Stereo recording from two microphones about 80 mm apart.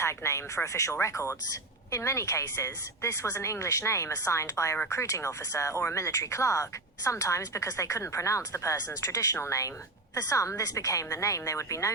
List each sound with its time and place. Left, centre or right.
0.0 s speech: left